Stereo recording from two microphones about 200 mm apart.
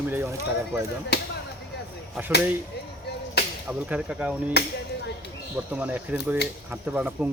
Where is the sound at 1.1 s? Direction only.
55° left (ahead or behind).